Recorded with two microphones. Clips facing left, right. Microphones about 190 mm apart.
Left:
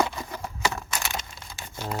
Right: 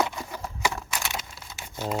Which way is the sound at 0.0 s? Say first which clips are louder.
Left 1 dB; 5° right (ahead or behind).